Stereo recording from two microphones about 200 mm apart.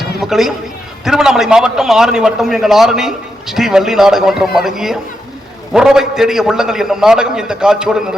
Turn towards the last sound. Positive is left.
turn(degrees=-5)  # may be behind; listen again after turning